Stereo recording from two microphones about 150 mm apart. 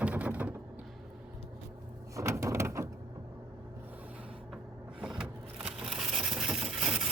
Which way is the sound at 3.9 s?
10° right (ahead or behind).